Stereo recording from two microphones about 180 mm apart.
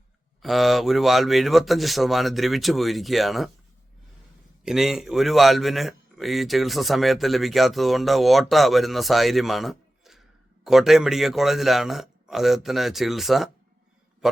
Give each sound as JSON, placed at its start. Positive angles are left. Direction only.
{"t": 0.4, "sound": "a man's voice", "side_deg": 0}
{"t": 4.6, "sound": "a man's voice", "side_deg": 0}